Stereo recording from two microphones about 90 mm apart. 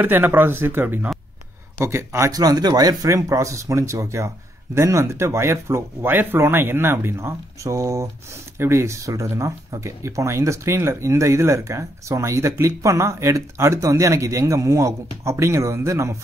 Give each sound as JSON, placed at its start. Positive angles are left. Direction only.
{"t": 0.0, "sound": "speech", "side_deg": -25}